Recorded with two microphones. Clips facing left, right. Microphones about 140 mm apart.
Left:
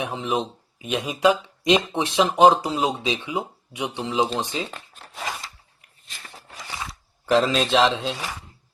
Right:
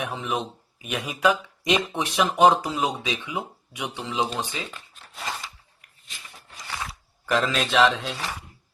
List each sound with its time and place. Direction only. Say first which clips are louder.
0.0 s speech: left 3 dB; 20° left (ahead or behind)
6.1 s a sound: left 3 dB; 45° left (ahead or behind)
7.3 s speech: left 3 dB; 25° left (ahead or behind)